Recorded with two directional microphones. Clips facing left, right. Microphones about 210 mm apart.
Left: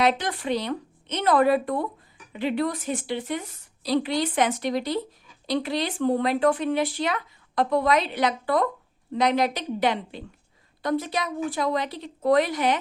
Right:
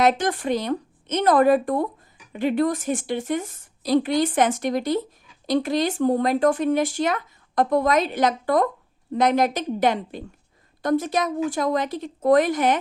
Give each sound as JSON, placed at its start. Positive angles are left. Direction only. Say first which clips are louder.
{"t": 0.0, "sound": "speech", "louder": "right 3 dB", "side_deg": -45}